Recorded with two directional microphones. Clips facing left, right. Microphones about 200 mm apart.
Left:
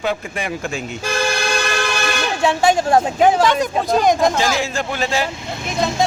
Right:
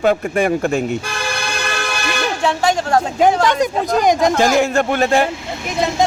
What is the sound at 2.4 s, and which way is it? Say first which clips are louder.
Speech: left 3 dB; 10° left (ahead or behind).